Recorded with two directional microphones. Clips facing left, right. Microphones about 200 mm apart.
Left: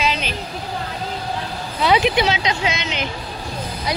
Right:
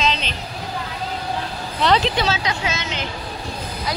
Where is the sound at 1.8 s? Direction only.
10° left (ahead or behind).